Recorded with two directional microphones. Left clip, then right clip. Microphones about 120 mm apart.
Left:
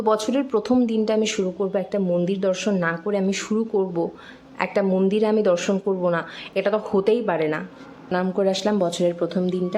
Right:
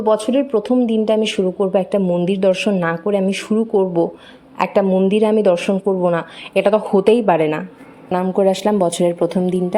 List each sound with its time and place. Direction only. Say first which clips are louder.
0.0 s speech: right 5 dB; 15° right (ahead or behind)
1.7 s a woman's voice: right 6 dB; 35° right (ahead or behind)
3.2 s speech: right 5 dB; 15° right (ahead or behind)
3.7 s speech: right 9 dB; 25° right (ahead or behind)
6.1 s a woman's voice: right 6 dB; 35° right (ahead or behind)
7.0 s a woman's voice: right 7 dB; 40° right (ahead or behind)
8.1 s speech: right 6 dB; 20° right (ahead or behind)